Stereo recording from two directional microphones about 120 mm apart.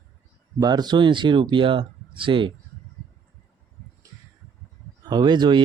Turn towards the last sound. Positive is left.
turn(degrees=-40)  # may be behind; listen again after turning